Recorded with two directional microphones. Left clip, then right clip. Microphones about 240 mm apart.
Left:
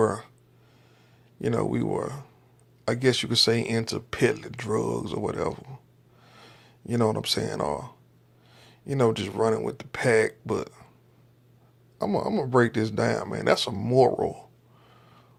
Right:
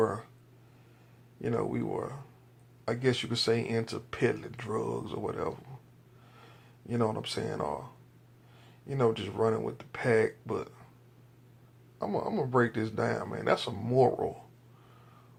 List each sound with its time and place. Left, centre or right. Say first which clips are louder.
0.0 s speech: left 5 dB; left
1.4 s speech: left 5 dB; left
11.9 s speech: left 5 dB; left